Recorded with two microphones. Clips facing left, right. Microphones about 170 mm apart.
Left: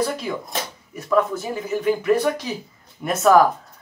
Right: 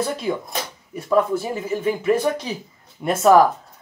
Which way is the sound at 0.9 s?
30° right (ahead or behind).